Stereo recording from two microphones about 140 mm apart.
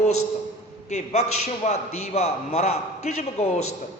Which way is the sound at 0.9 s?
55° left (ahead or behind).